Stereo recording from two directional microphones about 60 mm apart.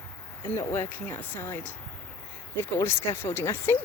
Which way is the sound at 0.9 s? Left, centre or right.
Left.